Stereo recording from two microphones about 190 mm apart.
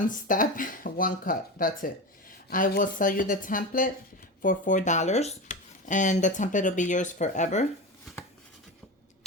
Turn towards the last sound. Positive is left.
turn(degrees=40)  # may be behind; listen again after turning